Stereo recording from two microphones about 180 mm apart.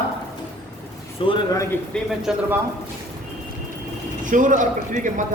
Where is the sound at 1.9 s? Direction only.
5° left (ahead or behind).